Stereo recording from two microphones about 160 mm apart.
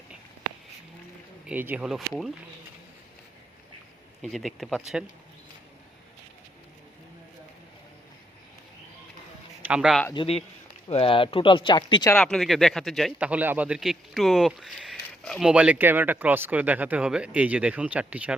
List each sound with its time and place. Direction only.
1.5 s a man's voice: 10° right (ahead or behind)
4.2 s a man's voice: centre (ahead or behind)
9.6 s a man's voice: 5° right (ahead or behind)
10.8 s speech: 35° left (ahead or behind)
12.1 s a man's voice: 5° left (ahead or behind)